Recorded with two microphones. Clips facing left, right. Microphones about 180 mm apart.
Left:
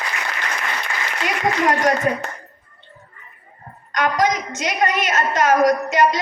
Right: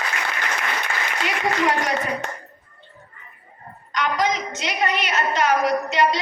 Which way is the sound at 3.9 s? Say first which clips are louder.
Left 3 dB; 50° left (ahead or behind).